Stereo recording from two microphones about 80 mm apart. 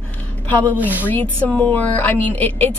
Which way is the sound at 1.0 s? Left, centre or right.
Left.